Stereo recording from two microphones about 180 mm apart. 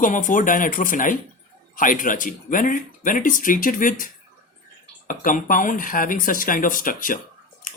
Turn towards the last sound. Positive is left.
turn(degrees=50)  # may be behind; listen again after turning